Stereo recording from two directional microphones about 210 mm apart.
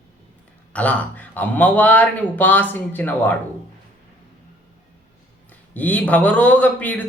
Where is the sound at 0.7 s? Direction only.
5° left (ahead or behind).